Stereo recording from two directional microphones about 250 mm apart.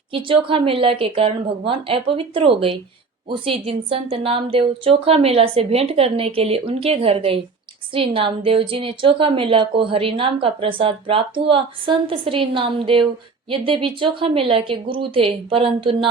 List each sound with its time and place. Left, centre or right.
0.3 s a woman's voice: right